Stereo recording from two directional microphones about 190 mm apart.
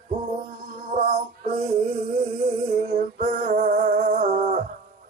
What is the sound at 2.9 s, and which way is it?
Music, 40° right (ahead or behind).